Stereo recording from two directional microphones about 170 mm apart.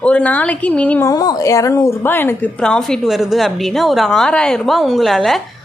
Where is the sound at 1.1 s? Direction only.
20° left (ahead or behind); by 5.4 s centre (ahead or behind).